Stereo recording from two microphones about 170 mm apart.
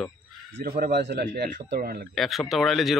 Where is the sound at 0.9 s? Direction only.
70° right (ahead or behind).